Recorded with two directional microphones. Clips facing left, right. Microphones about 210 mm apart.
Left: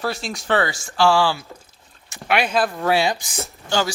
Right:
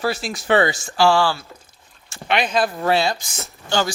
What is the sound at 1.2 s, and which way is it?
Speech, 10° left (ahead or behind).